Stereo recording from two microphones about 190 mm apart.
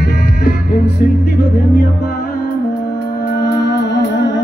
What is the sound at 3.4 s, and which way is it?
Music, 65° left (ahead or behind).